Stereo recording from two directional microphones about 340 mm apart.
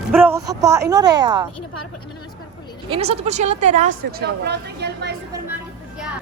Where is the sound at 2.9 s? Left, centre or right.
Centre.